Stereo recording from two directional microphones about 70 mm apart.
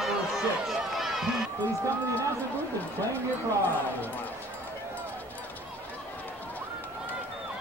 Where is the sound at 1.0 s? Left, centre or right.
Centre.